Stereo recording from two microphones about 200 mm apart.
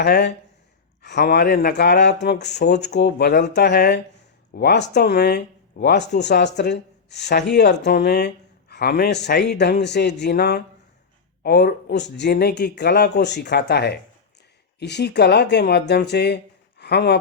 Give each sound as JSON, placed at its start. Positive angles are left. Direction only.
{"t": 0.0, "sound": "speech", "side_deg": 55}